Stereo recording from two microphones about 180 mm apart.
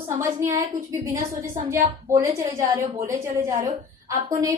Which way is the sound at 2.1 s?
15° right (ahead or behind).